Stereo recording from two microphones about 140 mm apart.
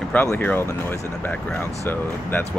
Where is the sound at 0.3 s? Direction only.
15° left (ahead or behind).